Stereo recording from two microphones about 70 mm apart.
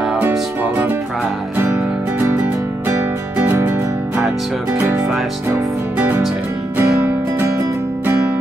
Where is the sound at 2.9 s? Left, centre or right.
Right.